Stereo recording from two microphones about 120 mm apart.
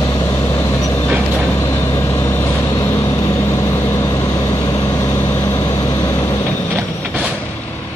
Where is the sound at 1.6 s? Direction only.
20° left (ahead or behind).